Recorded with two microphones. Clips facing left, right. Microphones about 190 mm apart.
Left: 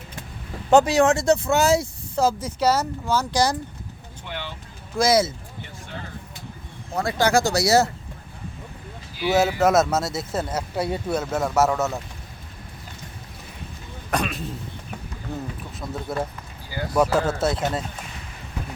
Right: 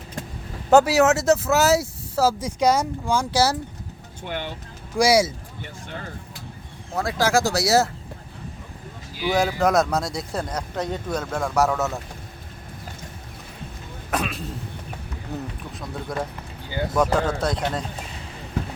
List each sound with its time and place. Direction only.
0.7 s speech: 5° right (ahead or behind)
4.3 s speech: 50° right (ahead or behind)
4.9 s speech: 10° right (ahead or behind)
6.9 s speech: centre (ahead or behind)
9.3 s speech: 5° left (ahead or behind)
14.1 s a sound: centre (ahead or behind)
16.1 s speech: 5° left (ahead or behind)